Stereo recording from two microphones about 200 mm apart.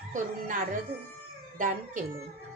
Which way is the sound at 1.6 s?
40° right (ahead or behind).